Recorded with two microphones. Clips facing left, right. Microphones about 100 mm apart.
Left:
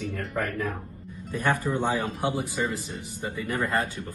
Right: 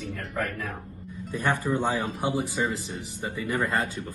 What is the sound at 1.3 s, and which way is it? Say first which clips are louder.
Speech: left 1 dB; 15° right (ahead or behind).